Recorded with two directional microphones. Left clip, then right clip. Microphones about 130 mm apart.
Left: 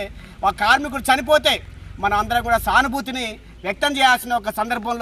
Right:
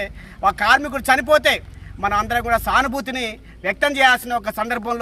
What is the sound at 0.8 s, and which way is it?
Speech, 10° right (ahead or behind).